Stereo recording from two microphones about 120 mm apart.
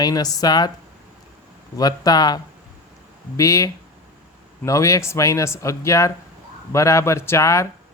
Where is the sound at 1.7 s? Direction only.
30° left (ahead or behind).